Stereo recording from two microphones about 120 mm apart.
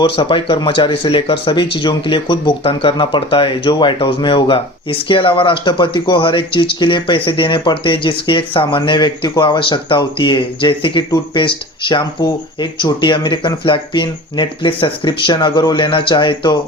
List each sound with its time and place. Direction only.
0.0 s speech: 45° left (ahead or behind)